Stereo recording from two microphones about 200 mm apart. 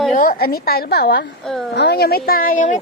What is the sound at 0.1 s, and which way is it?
Speech, 45° left (ahead or behind).